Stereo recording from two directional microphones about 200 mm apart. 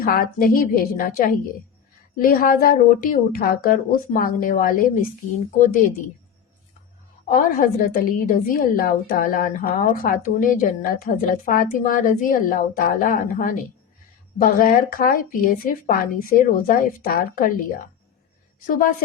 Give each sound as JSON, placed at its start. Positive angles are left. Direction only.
{"t": 0.0, "sound": "a woman's voice", "side_deg": 45}
{"t": 7.3, "sound": "a woman's voice", "side_deg": 45}
{"t": 18.6, "sound": "a woman's voice", "side_deg": 45}